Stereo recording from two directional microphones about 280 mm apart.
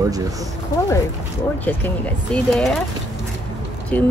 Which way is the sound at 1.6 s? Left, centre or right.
Centre.